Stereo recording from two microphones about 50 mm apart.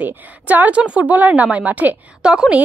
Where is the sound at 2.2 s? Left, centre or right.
Centre.